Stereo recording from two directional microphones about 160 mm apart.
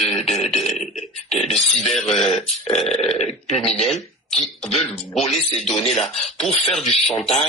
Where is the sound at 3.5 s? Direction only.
40° left (ahead or behind).